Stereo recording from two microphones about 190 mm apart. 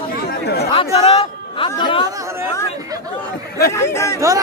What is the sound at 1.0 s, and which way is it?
Speech, 30° left (ahead or behind).